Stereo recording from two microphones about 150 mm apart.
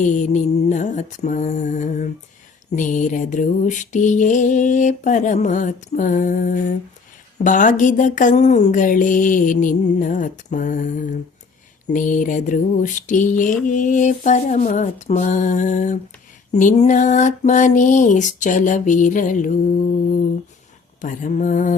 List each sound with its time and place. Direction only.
0.0 s mantra: 55° left (ahead or behind)
21.0 s mantra: 60° left (ahead or behind)